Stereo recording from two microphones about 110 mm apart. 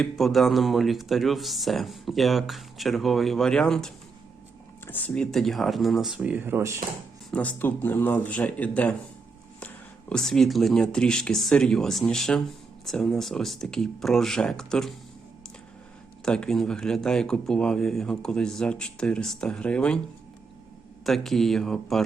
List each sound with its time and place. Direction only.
0.0 s speech: centre (ahead or behind)
4.9 s speech: 15° left (ahead or behind); by 6.1 s centre (ahead or behind)
6.1 s speech: 15° right (ahead or behind)
7.3 s speech: 10° left (ahead or behind)
16.2 s speech: 5° left (ahead or behind)
21.0 s speech: 5° left (ahead or behind)